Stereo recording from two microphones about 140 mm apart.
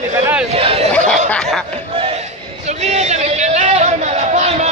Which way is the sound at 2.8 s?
55° right (ahead or behind).